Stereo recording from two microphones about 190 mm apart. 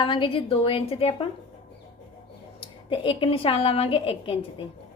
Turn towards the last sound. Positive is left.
turn(degrees=30)  # may be behind; listen again after turning